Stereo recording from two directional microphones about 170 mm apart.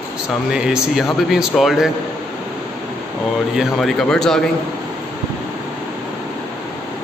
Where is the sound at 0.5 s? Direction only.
5° right (ahead or behind).